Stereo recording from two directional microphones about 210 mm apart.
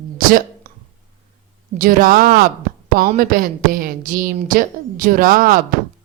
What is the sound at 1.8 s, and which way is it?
A woman's voice, 40° right (ahead or behind).